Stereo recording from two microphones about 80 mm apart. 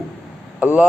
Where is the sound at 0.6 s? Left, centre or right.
Centre.